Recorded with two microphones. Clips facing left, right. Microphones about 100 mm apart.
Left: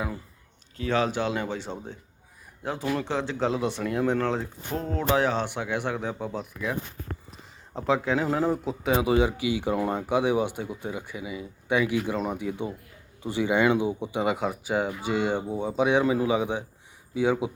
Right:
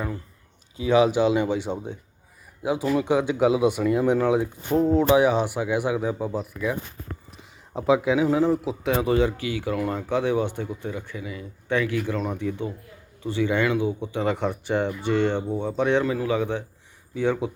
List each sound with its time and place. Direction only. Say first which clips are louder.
0.8 s speech: right 7 dB; 15° right (ahead or behind)
7.8 s a man's voice: right 5 dB; 10° right (ahead or behind); by 17.5 s 10° left (ahead or behind)